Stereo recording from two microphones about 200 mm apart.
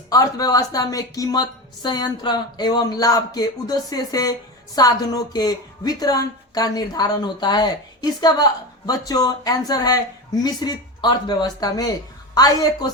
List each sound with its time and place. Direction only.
0.1 s a woman's voice: 20° left (ahead or behind)